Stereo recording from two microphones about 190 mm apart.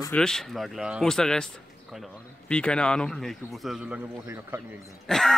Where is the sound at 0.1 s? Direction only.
5° left (ahead or behind).